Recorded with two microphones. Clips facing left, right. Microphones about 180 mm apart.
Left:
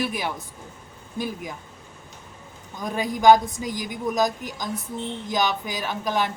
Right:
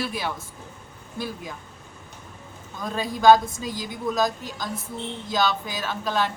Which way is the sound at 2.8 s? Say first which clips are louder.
Even; 15° left (ahead or behind).